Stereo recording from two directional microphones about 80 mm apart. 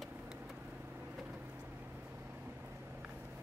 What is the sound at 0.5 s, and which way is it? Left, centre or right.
Vehicle, centre.